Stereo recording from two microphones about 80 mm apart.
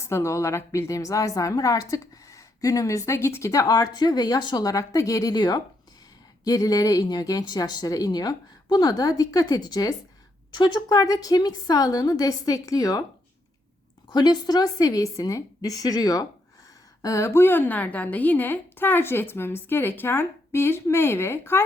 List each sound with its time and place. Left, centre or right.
0.0 s a woman's voice: left
14.1 s a woman's voice: left
17.2 s a woman's voice: left